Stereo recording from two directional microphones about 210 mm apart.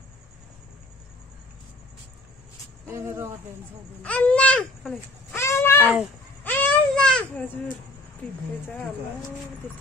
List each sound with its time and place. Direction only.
2.9 s speech: 10° right (ahead or behind)
4.0 s a child's voice: 5° left (ahead or behind)
6.4 s a sound: 10° left (ahead or behind)